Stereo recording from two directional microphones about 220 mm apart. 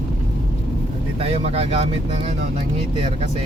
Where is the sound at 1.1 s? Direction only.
25° right (ahead or behind).